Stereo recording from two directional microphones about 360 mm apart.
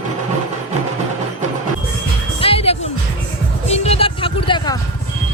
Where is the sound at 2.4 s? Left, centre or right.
Centre.